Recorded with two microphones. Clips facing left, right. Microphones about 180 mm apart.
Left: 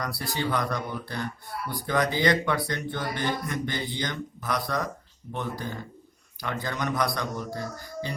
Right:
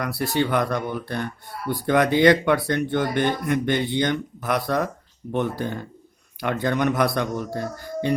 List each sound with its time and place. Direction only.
0.0 s speech: 60° right (ahead or behind)